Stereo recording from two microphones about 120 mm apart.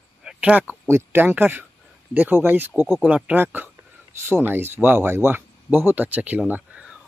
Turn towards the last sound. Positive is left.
turn(degrees=-10)  # may be behind; listen again after turning